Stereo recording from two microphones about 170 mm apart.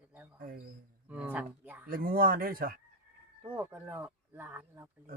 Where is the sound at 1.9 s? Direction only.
60° right (ahead or behind).